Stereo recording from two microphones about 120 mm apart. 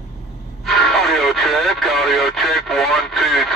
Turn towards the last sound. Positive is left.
turn(degrees=0)  # may be behind; listen again after turning